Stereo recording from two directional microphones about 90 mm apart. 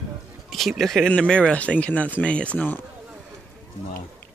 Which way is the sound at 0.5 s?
Centre (ahead or behind).